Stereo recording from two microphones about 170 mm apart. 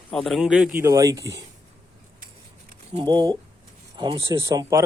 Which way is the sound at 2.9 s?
30° right (ahead or behind).